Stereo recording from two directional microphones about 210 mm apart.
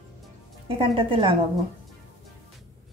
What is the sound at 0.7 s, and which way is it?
Speech, 25° right (ahead or behind).